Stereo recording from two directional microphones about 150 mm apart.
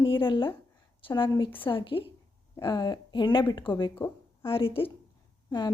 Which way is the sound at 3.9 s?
15° left (ahead or behind).